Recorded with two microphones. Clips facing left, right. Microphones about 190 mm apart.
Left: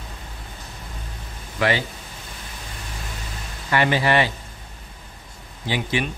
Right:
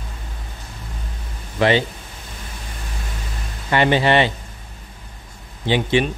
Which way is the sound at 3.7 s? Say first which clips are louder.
Right 3 dB; 25° right (ahead or behind).